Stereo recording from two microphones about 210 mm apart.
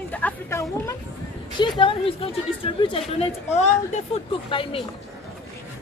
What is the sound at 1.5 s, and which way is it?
A woman's voice, 25° left (ahead or behind).